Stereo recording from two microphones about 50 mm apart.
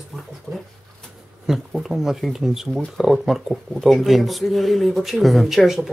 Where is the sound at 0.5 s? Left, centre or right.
Left.